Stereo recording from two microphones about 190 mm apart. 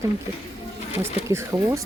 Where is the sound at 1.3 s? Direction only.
15° right (ahead or behind).